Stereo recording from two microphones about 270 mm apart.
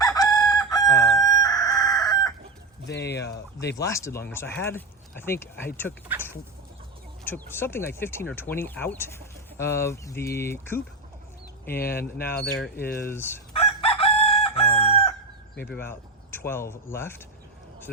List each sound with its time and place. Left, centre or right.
0.0 s chicken: centre
2.8 s a sound: left
3.2 s speech: left
3.8 s speech: centre
7.3 s speech: centre
13.5 s chicken: left
15.6 s speech: centre